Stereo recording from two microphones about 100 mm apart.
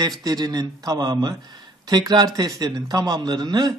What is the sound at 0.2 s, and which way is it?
A man's voice, 40° right (ahead or behind).